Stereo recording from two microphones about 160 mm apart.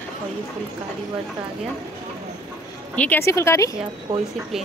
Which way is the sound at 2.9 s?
10° left (ahead or behind).